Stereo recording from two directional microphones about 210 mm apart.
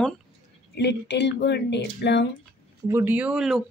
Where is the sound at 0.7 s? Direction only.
55° left (ahead or behind).